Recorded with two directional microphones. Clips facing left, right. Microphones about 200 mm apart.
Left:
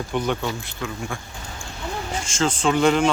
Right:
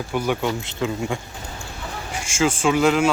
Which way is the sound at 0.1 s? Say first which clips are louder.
Right 1 dB; 10° right (ahead or behind).